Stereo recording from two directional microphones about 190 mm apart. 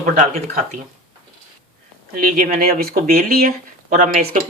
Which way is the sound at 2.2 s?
45° right (ahead or behind).